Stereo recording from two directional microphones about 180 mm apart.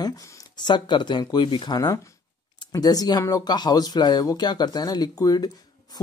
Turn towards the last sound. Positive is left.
turn(degrees=20)  # may be behind; listen again after turning